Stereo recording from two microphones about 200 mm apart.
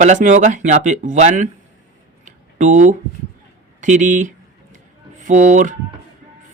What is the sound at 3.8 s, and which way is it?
Speech, 40° right (ahead or behind).